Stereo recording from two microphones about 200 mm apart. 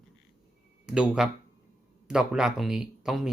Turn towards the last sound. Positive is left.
turn(degrees=0)  # may be behind; listen again after turning